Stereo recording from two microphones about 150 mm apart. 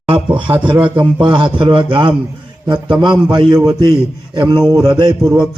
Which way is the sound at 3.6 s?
25° right (ahead or behind).